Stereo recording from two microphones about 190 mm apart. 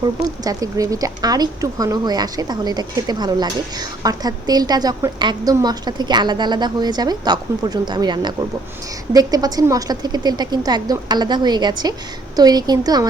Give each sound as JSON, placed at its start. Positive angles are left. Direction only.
{"t": 0.4, "sound": "speech", "side_deg": -20}